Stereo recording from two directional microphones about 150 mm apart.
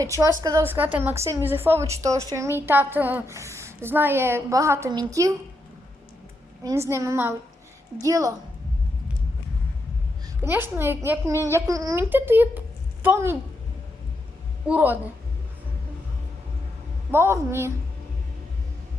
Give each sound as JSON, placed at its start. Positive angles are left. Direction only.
{"t": 0.0, "sound": "a woman's voice", "side_deg": -20}
{"t": 6.6, "sound": "a woman's voice", "side_deg": -20}
{"t": 10.4, "sound": "a woman's voice", "side_deg": -15}
{"t": 14.7, "sound": "a woman's voice", "side_deg": -10}
{"t": 17.1, "sound": "a woman's voice", "side_deg": -15}